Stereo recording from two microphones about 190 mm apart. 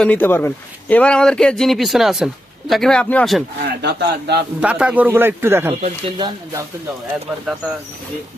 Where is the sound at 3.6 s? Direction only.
60° right (ahead or behind).